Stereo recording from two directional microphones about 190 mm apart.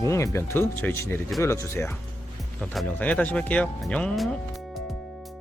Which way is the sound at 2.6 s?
5° left (ahead or behind).